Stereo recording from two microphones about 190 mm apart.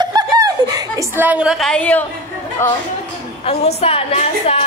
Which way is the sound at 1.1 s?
5° right (ahead or behind).